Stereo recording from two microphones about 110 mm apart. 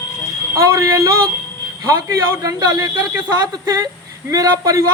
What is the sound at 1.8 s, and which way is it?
Speech, 30° right (ahead or behind).